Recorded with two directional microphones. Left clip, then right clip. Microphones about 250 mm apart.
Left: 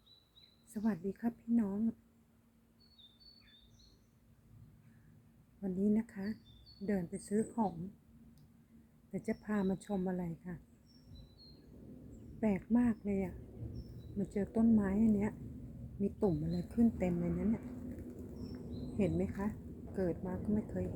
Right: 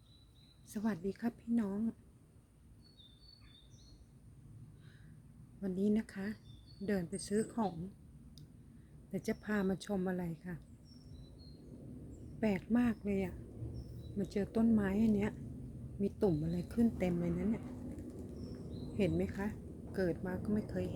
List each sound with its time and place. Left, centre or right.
0.7 s a woman's voice: centre
5.6 s a woman's voice: centre
9.1 s a woman's voice: centre
12.4 s a woman's voice: centre
18.9 s a woman's voice: centre